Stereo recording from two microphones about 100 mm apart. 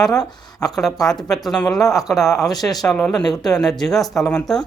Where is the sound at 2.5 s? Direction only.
40° left (ahead or behind).